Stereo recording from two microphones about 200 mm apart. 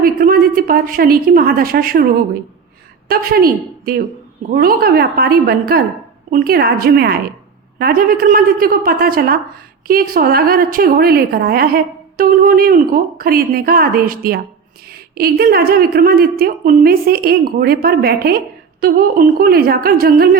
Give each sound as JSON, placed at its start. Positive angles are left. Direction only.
{"t": 0.0, "sound": "a woman's voice", "side_deg": -45}
{"t": 3.1, "sound": "a woman's voice", "side_deg": -50}